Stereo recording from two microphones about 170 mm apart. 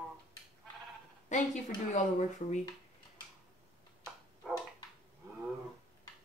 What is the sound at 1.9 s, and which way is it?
Speech, 45° left (ahead or behind).